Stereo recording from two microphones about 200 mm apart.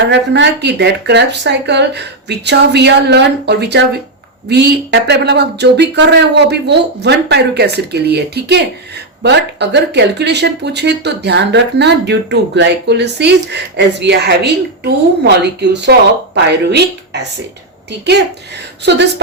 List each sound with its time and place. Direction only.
0.1 s speech: 65° right (ahead or behind)